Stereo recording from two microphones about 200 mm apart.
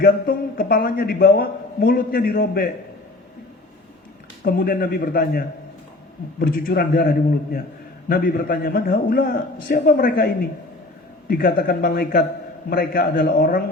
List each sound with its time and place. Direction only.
0.0 s a man's voice: 45° left (ahead or behind)
4.4 s a man's voice: 50° left (ahead or behind)